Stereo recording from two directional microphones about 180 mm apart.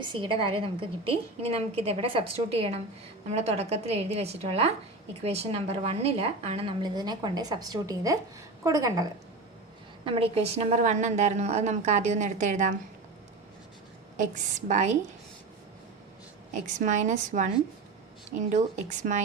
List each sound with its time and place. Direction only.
0.0 s a woman's voice: 25° right (ahead or behind)
10.0 s a woman's voice: 30° right (ahead or behind)
14.7 s a woman's voice: 40° right (ahead or behind)
16.6 s a woman's voice: 40° right (ahead or behind)